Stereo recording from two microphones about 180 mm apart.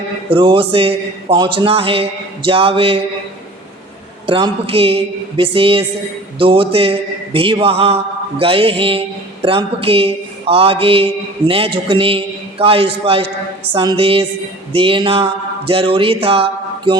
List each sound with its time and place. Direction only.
0.3 s a man's voice: 30° right (ahead or behind)
4.3 s a man's voice: 30° right (ahead or behind)